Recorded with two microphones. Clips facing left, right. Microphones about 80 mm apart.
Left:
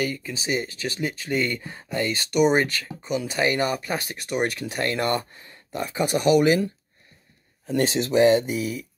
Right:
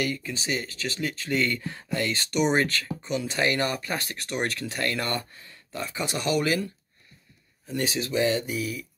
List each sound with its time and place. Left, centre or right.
0.0 s speech: centre
7.6 s speech: left
8.1 s speech: left